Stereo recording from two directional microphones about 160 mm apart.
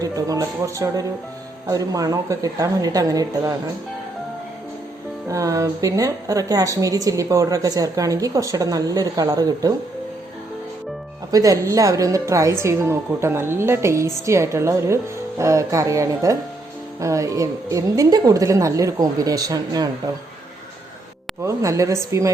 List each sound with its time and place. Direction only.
0.0 s a woman's voice: 20° right (ahead or behind)
5.3 s a woman's voice: 20° right (ahead or behind)
11.3 s a woman's voice: 20° right (ahead or behind)
21.4 s a woman's voice: 20° right (ahead or behind)